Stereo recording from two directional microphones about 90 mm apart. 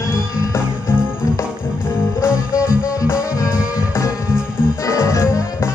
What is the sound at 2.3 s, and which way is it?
Music, 10° right (ahead or behind).